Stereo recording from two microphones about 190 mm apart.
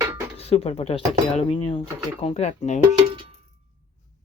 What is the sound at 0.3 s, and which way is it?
Speech, 30° left (ahead or behind).